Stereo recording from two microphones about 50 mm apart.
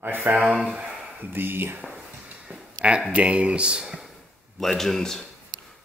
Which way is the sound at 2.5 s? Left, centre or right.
Right.